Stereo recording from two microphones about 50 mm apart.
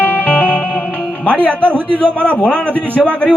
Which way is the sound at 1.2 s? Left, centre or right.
Left.